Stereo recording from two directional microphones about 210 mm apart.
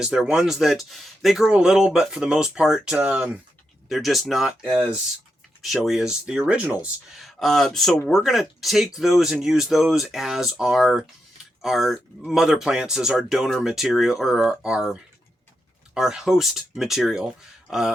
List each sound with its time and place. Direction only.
0.0 s speech: 5° right (ahead or behind)
16.0 s speech: centre (ahead or behind)